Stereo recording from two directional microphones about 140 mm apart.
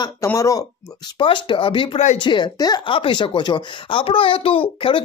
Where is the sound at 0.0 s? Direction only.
20° left (ahead or behind).